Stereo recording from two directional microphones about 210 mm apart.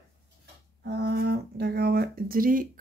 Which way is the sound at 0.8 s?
50° right (ahead or behind).